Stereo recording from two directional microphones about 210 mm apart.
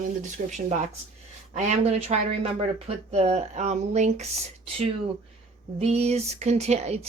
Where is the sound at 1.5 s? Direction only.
30° right (ahead or behind).